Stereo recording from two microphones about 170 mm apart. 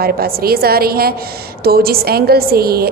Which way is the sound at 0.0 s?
65° right (ahead or behind).